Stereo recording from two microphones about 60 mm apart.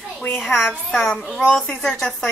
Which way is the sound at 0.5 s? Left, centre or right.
Centre.